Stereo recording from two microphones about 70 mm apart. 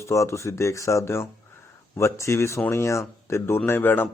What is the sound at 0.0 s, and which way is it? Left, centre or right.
Speech, left.